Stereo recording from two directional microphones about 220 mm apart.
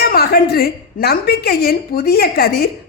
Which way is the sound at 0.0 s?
45° left (ahead or behind).